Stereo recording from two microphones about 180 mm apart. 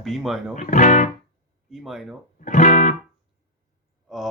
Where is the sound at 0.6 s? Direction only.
45° left (ahead or behind).